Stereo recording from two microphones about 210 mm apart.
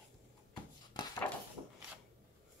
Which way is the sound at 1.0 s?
20° left (ahead or behind).